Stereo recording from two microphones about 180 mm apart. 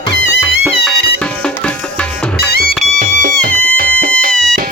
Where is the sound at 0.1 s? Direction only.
75° left (ahead or behind).